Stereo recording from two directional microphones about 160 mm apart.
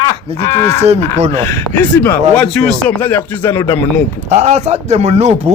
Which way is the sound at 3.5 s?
30° left (ahead or behind).